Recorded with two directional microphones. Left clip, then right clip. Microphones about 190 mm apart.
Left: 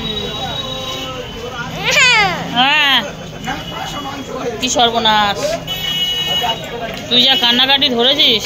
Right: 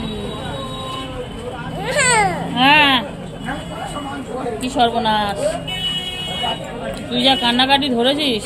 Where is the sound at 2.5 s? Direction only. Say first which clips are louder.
Even; centre (ahead or behind).